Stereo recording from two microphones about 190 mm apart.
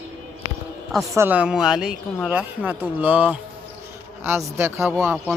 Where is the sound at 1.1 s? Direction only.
10° right (ahead or behind).